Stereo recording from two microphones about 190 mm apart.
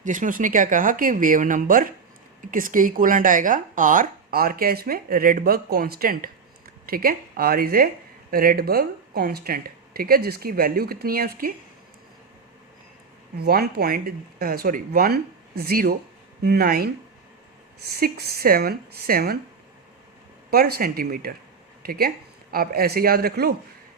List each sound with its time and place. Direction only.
0.0 s speech: 40° right (ahead or behind)
13.3 s speech: 55° right (ahead or behind)
20.5 s speech: 50° right (ahead or behind)